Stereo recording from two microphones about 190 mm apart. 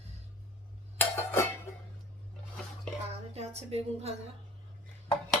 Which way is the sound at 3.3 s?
35° right (ahead or behind).